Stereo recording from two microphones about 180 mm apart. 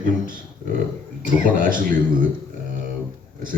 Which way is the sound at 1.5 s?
50° right (ahead or behind).